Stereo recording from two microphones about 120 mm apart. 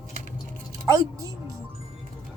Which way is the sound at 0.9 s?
30° right (ahead or behind).